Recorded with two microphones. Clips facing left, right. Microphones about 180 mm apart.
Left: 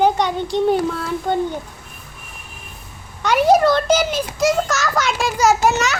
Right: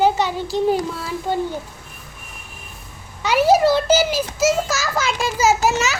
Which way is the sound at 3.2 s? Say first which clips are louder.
Left 1 dB; 5° right (ahead or behind).